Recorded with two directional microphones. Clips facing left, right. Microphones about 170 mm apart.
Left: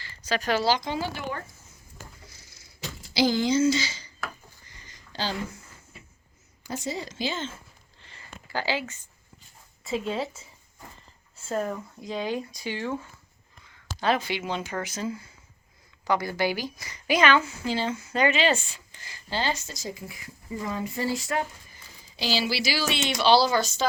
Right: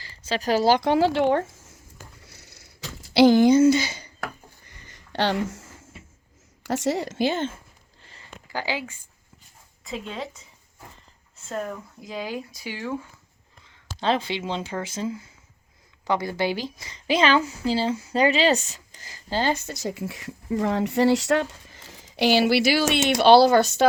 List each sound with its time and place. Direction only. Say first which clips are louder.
0.0 s speech: right 2 dB; 30° right (ahead or behind)
0.7 s a woman's voice: right 8 dB; 70° right (ahead or behind)
2.2 s a sound: right 2 dB; 65° right (ahead or behind); by 5.7 s 85° right
6.6 s a woman's voice: right 8 dB; 75° right (ahead or behind); by 7.5 s 60° right (ahead or behind)
8.4 s speech: even; 15° right (ahead or behind)
9.8 s speech: left 4 dB; centre (ahead or behind)
13.9 s a woman's voice: right 1 dB; 25° right (ahead or behind); by 23.8 s 60° right (ahead or behind)